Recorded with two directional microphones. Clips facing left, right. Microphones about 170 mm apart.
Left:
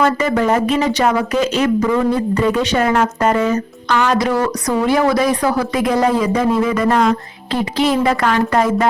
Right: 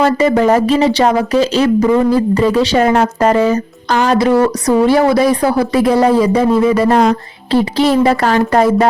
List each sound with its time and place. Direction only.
0.0 s speech: 30° right (ahead or behind)